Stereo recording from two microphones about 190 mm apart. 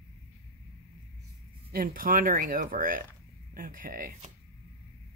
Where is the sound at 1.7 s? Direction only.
50° right (ahead or behind).